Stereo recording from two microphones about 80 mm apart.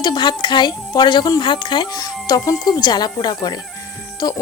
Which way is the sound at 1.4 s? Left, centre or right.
Left.